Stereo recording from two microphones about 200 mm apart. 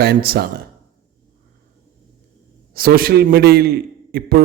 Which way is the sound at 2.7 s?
50° right (ahead or behind).